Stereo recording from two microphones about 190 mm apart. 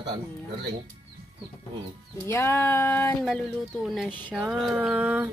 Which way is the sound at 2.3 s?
10° left (ahead or behind).